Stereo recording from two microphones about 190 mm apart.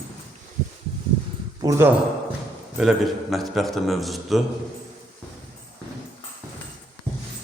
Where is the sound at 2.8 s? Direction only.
Centre (ahead or behind).